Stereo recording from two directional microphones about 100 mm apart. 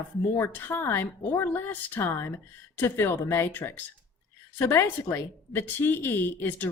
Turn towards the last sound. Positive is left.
turn(degrees=20)  # may be behind; listen again after turning